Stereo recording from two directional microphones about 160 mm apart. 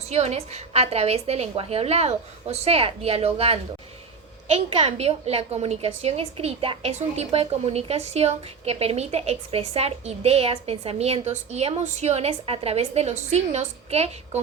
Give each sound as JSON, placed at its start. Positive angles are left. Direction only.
{"t": 0.1, "sound": "a woman's voice", "side_deg": -40}